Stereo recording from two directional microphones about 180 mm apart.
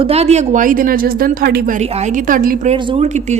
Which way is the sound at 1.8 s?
40° right (ahead or behind).